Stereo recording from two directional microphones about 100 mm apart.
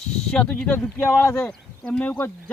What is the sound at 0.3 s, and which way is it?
Speech, 10° left (ahead or behind).